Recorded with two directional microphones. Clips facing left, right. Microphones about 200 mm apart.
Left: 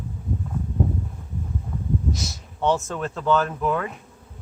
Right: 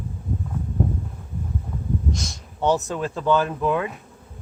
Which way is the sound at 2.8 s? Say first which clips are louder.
Right 2 dB; 10° right (ahead or behind).